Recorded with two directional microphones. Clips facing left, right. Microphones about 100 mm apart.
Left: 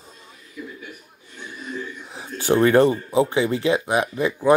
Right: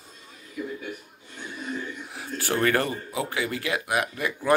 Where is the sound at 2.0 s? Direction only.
20° left (ahead or behind).